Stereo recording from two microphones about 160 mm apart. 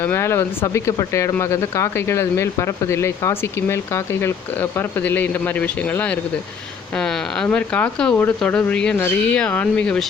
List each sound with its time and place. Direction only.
0.0 s speech: 15° left (ahead or behind)